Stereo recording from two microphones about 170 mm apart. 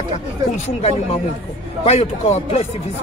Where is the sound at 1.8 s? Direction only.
35° left (ahead or behind).